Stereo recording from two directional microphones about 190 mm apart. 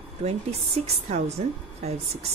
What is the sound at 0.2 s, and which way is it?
A woman's voice, 35° right (ahead or behind).